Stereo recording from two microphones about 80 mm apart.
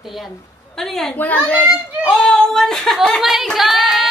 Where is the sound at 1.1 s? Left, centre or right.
Left.